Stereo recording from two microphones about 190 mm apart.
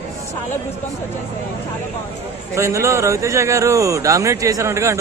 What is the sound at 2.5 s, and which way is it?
A man's voice, 15° right (ahead or behind).